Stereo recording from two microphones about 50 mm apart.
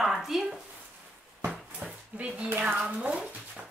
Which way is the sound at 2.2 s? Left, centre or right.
Right.